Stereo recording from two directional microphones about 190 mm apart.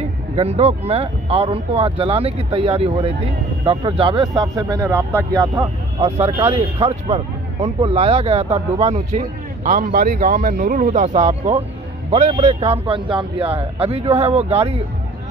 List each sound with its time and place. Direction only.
0.4 s speech: 35° right (ahead or behind)
5.9 s speech: 30° right (ahead or behind)